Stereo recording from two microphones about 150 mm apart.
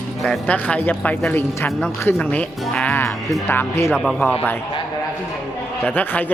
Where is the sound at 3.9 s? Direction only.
Centre (ahead or behind).